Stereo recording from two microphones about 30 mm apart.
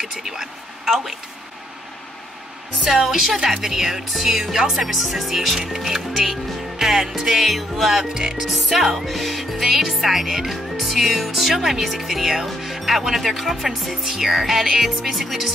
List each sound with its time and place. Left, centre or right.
0.0 s speech: centre
2.8 s speech: centre
5.6 s speech: centre
8.0 s speech: right
8.5 s speech: centre
14.0 s speech: centre